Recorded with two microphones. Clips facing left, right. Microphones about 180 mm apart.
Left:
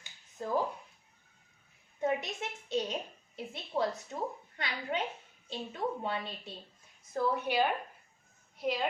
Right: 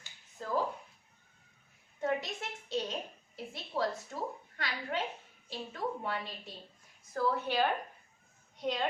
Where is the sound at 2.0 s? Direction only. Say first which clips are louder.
Left 1 dB; 20° left (ahead or behind).